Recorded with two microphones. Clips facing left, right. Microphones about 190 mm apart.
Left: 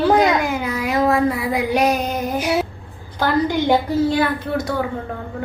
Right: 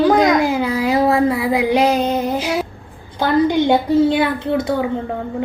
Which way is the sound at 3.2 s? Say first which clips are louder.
Right 4 dB; 20° right (ahead or behind).